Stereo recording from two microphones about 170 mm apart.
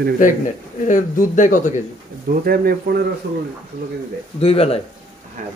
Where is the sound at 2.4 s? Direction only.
60° right (ahead or behind).